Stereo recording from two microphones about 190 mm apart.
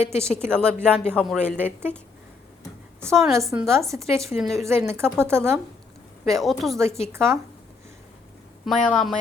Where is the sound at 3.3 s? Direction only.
15° right (ahead or behind).